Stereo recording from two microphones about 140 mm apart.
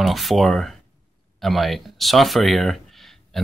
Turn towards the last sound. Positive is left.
turn(degrees=0)  # may be behind; listen again after turning